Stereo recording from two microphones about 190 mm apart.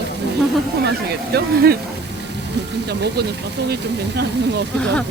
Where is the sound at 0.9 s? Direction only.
60° right (ahead or behind).